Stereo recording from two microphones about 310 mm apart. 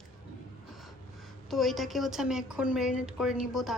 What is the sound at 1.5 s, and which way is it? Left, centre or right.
Speech, centre.